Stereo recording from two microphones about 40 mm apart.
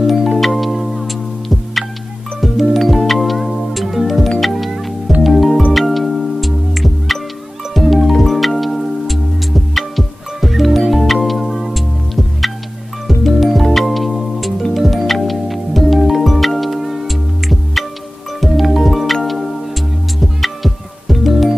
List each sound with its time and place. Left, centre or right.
0.0 s music: centre
2.4 s music: centre
13.0 s music: centre